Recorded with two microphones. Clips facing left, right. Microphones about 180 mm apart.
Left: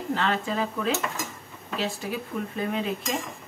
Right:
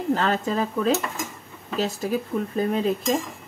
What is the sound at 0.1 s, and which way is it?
Cutlery, 40° right (ahead or behind).